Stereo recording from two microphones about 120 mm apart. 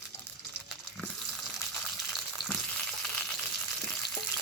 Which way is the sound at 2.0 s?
Centre (ahead or behind).